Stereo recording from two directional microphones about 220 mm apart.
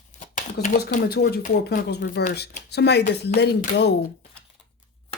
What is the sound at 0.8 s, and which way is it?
Speech, 45° left (ahead or behind).